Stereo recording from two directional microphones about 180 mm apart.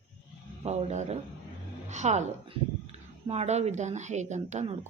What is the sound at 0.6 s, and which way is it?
Speech, 40° right (ahead or behind).